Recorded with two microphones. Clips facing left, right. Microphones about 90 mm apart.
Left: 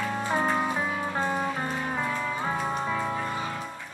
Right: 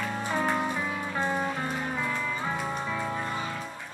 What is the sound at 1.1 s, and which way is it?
Music, 30° left (ahead or behind).